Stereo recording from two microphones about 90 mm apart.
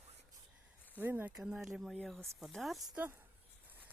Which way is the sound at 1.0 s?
20° right (ahead or behind).